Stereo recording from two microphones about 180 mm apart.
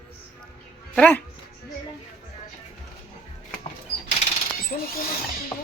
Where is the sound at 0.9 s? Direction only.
10° left (ahead or behind).